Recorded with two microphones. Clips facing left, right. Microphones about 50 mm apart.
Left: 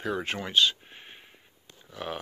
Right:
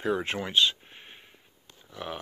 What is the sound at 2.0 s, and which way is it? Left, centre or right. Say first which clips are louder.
Speech: left 1 dB; centre.